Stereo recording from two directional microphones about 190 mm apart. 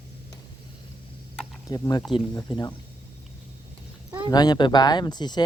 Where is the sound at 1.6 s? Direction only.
20° left (ahead or behind).